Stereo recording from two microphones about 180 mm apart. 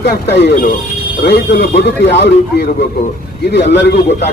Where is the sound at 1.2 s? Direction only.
70° left (ahead or behind).